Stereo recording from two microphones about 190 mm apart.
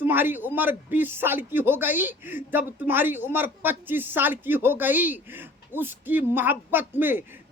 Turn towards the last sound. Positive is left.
turn(degrees=-10)  # may be behind; listen again after turning